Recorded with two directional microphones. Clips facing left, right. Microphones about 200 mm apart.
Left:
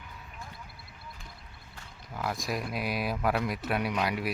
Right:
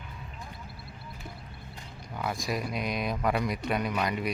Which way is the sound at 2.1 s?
Centre (ahead or behind).